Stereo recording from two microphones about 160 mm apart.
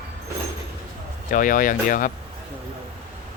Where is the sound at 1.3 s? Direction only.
55° left (ahead or behind).